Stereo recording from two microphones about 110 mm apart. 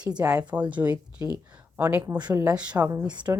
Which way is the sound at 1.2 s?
30° right (ahead or behind).